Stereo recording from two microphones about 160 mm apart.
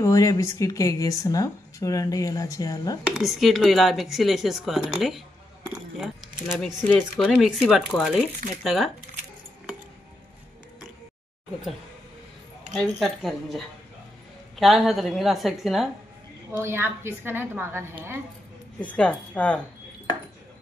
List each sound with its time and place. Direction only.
0.0 s speech: 20° left (ahead or behind)
3.2 s speech: centre (ahead or behind)
6.5 s speech: 5° left (ahead or behind)
13.0 s speech: centre (ahead or behind)
16.5 s a woman's voice: 15° right (ahead or behind)
18.8 s speech: 10° left (ahead or behind)